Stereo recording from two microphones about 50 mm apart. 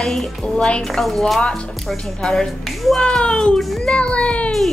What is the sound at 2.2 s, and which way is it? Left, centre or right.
Speech, centre.